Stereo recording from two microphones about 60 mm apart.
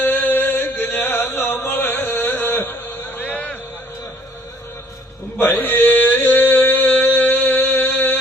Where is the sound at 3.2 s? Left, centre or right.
Left.